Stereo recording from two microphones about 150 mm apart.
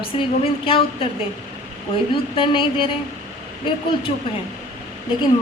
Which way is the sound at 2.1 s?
35° left (ahead or behind).